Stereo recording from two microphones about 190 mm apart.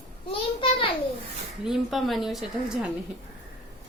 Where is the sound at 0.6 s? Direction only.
30° left (ahead or behind).